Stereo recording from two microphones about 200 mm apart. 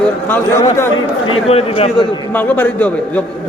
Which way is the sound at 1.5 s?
30° left (ahead or behind).